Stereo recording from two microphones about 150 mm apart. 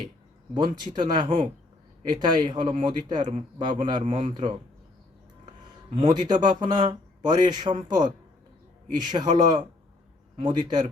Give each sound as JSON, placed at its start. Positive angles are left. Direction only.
{"t": 0.5, "sound": "a man's voice", "side_deg": -30}